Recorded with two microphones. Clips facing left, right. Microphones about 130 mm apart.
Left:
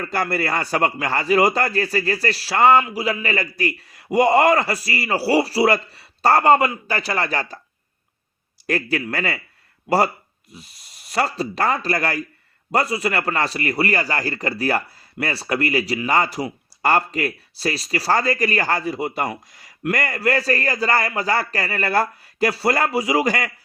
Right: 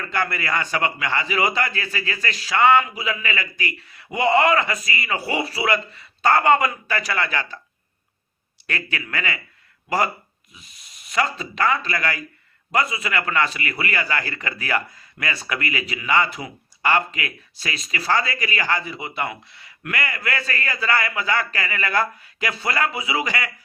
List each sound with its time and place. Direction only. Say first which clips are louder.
0.0 s a man's voice: left 3 dB; 35° left (ahead or behind)
8.6 s a man's voice: left 7 dB; 40° left (ahead or behind)
11.3 s a man's voice: left 1 dB; 35° left (ahead or behind)